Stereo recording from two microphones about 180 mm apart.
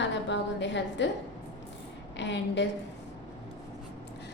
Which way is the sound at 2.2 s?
75° left (ahead or behind).